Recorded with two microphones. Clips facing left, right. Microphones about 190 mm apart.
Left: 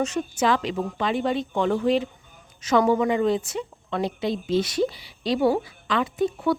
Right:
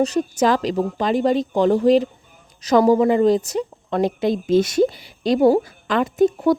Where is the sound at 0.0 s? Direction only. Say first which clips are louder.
Right 6 dB; 35° right (ahead or behind).